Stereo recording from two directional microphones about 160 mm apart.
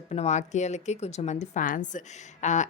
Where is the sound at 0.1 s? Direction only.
45° left (ahead or behind).